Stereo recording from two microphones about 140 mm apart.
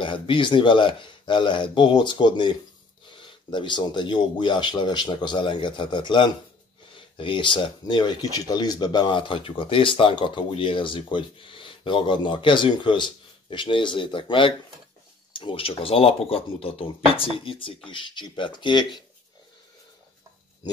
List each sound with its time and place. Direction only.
0.0 s speech: 35° left (ahead or behind)